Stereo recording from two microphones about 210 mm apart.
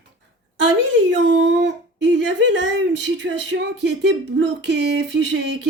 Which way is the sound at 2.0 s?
60° right (ahead or behind).